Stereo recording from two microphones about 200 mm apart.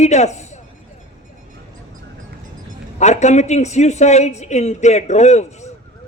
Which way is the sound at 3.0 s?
35° left (ahead or behind).